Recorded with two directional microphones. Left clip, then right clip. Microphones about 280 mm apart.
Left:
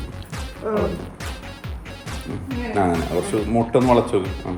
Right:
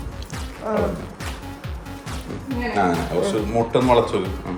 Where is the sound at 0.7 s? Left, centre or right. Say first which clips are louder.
Even; centre.